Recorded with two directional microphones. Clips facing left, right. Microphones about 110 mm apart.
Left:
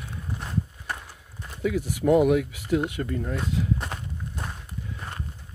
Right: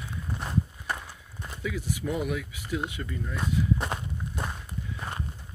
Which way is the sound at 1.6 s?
60° left (ahead or behind).